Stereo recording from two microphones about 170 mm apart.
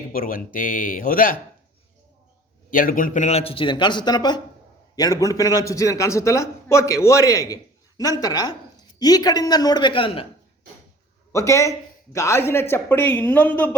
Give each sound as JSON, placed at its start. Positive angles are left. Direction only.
{"t": 0.1, "sound": "speech", "side_deg": 55}
{"t": 2.6, "sound": "a man's voice", "side_deg": 55}
{"t": 11.3, "sound": "speech", "side_deg": 15}